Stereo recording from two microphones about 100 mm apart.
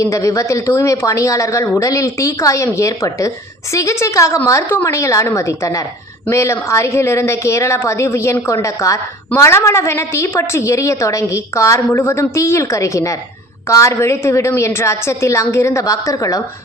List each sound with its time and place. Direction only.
0.0 s a woman's voice: 30° left (ahead or behind)